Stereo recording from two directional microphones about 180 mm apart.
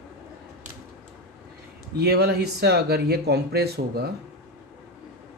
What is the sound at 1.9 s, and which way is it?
Speech, 60° right (ahead or behind).